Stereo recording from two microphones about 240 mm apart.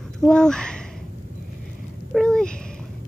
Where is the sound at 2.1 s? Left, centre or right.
Centre.